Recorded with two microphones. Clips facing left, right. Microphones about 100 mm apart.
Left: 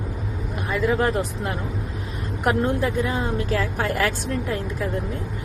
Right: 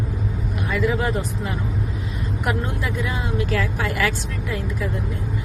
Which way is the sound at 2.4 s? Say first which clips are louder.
Left 5 dB; 40° left (ahead or behind).